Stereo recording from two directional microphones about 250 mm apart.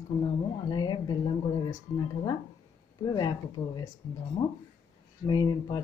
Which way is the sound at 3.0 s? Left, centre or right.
Centre.